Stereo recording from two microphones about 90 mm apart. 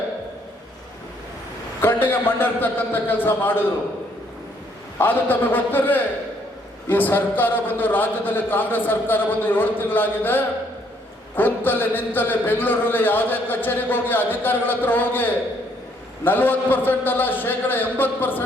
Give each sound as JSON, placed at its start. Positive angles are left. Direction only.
{"t": 1.8, "sound": "a man's voice", "side_deg": 20}
{"t": 4.9, "sound": "a man's voice", "side_deg": 20}